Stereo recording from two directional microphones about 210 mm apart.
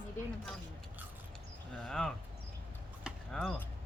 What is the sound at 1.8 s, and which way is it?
Speech, 5° left (ahead or behind).